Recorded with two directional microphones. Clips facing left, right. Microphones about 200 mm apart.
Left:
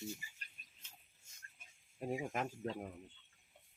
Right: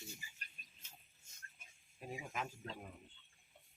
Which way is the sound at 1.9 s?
50° left (ahead or behind).